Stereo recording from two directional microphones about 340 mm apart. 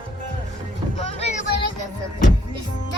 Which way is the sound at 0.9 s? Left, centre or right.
Centre.